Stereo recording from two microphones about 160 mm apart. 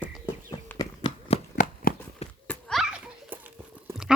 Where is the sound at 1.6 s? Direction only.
50° left (ahead or behind).